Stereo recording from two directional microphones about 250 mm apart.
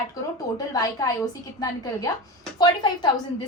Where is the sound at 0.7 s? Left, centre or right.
Centre.